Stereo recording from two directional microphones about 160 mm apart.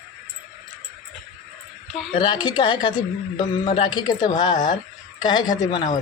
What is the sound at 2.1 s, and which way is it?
A woman's voice, 30° left (ahead or behind).